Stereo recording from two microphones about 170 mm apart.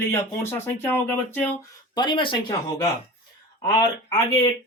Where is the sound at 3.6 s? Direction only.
20° left (ahead or behind).